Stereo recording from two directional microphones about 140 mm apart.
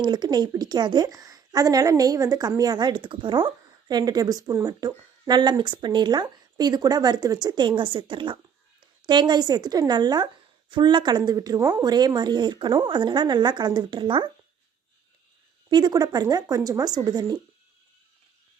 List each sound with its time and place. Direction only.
0.0 s a woman's voice: 30° right (ahead or behind)
15.7 s a woman's voice: 30° right (ahead or behind)